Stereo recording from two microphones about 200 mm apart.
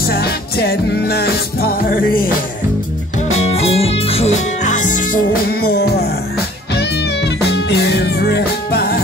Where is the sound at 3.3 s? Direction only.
30° left (ahead or behind).